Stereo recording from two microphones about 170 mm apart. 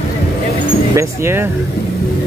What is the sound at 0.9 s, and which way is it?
Speech, 15° right (ahead or behind).